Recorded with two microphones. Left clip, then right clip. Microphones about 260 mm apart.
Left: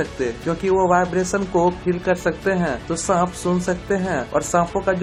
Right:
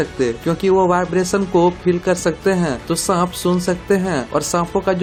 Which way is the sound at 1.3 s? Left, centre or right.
Right.